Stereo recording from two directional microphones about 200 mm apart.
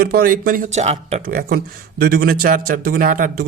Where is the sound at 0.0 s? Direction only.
50° right (ahead or behind); by 1.2 s 35° right (ahead or behind).